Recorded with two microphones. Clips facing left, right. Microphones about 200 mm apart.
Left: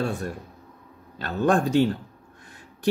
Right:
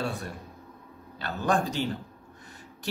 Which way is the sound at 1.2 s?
55° left (ahead or behind).